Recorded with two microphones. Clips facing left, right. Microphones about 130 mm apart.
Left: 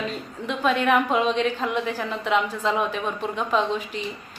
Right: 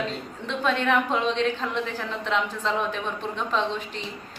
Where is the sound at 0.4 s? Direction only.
5° left (ahead or behind).